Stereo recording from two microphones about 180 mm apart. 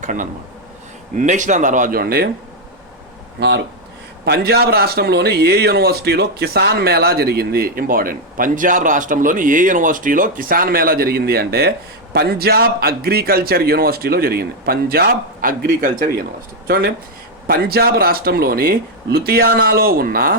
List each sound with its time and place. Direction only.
0.0 s speech: 45° right (ahead or behind)
4.3 s a man's voice: 60° right (ahead or behind)
16.6 s a man's voice: 60° right (ahead or behind)